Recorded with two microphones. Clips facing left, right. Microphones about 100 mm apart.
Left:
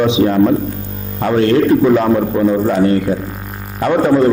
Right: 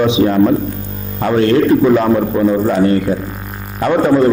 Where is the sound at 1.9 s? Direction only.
30° right (ahead or behind).